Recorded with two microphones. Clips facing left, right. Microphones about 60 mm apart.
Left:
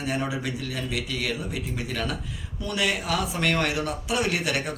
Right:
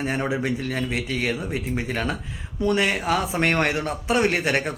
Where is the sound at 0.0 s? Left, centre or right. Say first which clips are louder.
Right 4 dB; right.